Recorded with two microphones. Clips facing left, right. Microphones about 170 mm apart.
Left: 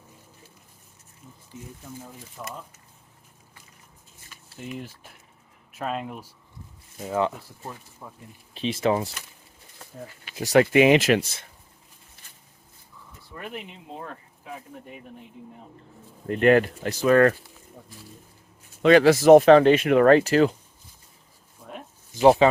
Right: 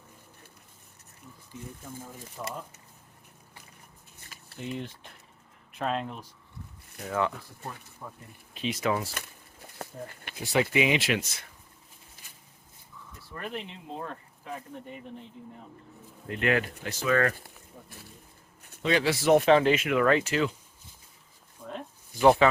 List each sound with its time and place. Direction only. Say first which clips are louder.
2.4 s speech: right 1 dB; 5° right (ahead or behind)
4.6 s speech: even; centre (ahead or behind)
7.0 s speech: left 4 dB; 20° left (ahead or behind)
8.0 s speech: right 1 dB; 10° left (ahead or behind)
8.5 s speech: left 5 dB; 30° left (ahead or behind)
10.4 s speech: left 8 dB; 70° left (ahead or behind); by 11.2 s 45° left (ahead or behind)
11.2 s speech: left 6 dB; 30° left (ahead or behind)
13.3 s speech: even; 5° left (ahead or behind)
16.2 s speech: left 9 dB; 45° left (ahead or behind)
17.4 s a sound: left 2 dB; 60° right (ahead or behind)
18.8 s speech: left 10 dB; 60° left (ahead or behind); by 20.6 s 45° left (ahead or behind)
22.1 s speech: left 4 dB; 25° left (ahead or behind)